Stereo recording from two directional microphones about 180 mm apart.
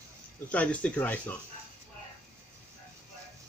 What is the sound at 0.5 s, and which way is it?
Speech, 5° left (ahead or behind).